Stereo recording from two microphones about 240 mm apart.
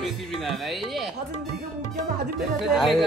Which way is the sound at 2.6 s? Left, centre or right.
Centre.